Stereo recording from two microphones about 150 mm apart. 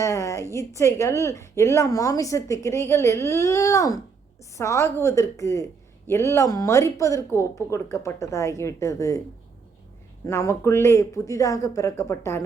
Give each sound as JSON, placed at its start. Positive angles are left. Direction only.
{"t": 0.0, "sound": "a woman's voice", "side_deg": 20}
{"t": 10.2, "sound": "a woman's voice", "side_deg": 20}